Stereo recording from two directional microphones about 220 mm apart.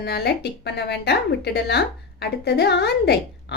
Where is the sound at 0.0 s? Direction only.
50° left (ahead or behind).